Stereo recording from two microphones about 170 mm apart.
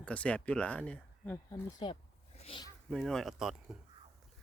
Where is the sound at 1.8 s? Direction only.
35° left (ahead or behind).